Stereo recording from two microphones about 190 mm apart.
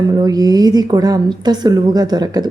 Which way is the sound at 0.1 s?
20° right (ahead or behind).